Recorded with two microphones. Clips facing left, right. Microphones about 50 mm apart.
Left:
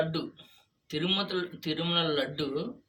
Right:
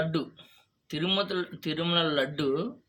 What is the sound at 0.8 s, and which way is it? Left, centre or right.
Speech, centre.